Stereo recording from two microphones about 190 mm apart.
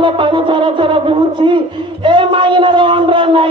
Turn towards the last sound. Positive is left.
turn(degrees=-25)  # may be behind; listen again after turning